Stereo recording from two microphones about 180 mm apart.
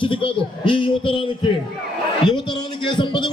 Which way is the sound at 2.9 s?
25° left (ahead or behind).